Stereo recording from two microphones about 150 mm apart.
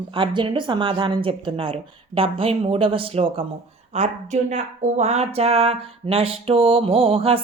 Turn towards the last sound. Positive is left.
turn(degrees=-40)  # may be behind; listen again after turning